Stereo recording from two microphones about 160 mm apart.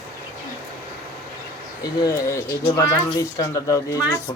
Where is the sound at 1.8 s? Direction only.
20° left (ahead or behind).